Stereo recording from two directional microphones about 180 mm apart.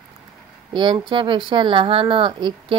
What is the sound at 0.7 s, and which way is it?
Speech, 25° right (ahead or behind).